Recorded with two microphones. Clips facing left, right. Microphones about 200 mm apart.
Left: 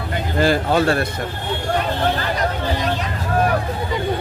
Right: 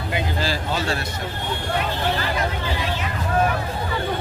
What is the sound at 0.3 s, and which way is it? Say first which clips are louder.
Speech: left 8 dB; 55° left (ahead or behind).